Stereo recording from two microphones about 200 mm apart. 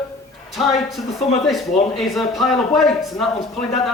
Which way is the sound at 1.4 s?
Centre (ahead or behind).